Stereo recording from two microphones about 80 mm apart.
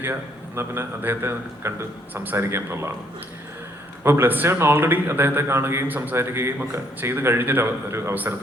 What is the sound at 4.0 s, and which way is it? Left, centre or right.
A man's voice, right.